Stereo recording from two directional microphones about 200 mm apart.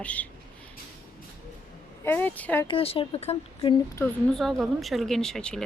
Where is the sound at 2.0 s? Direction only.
10° left (ahead or behind).